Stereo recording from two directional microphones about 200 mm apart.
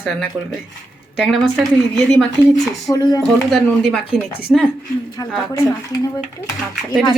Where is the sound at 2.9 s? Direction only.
20° left (ahead or behind).